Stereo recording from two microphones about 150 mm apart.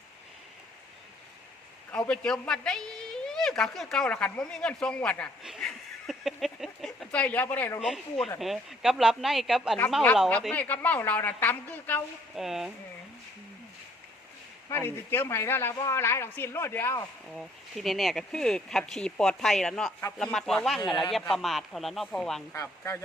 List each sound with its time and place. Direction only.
1.9 s a woman's voice: 5° left (ahead or behind)
5.4 s a sound: centre (ahead or behind)
7.8 s a woman's voice: centre (ahead or behind)
10.5 s a woman's voice: 10° left (ahead or behind)
12.3 s a woman's voice: centre (ahead or behind)
14.7 s a woman's voice: 15° left (ahead or behind)
17.2 s a woman's voice: centre (ahead or behind)
22.5 s a woman's voice: 15° left (ahead or behind)